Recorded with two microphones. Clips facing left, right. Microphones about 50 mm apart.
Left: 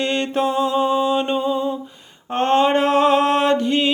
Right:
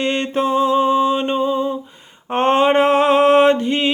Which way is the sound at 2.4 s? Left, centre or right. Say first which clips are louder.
Right 2 dB; centre.